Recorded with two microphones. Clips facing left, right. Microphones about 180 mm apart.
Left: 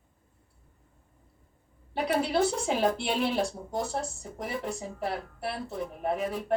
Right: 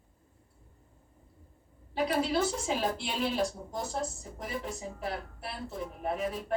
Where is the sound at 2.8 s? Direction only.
60° left (ahead or behind).